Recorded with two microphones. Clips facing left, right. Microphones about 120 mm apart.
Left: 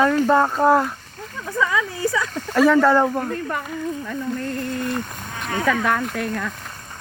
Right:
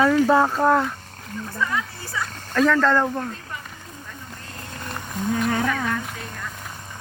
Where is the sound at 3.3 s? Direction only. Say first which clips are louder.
Left 11 dB; 60° left (ahead or behind).